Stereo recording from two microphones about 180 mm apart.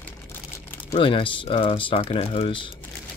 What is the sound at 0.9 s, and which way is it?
Speech, 30° left (ahead or behind).